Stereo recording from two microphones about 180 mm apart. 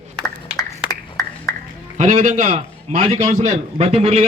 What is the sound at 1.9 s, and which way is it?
A man's voice, 45° right (ahead or behind).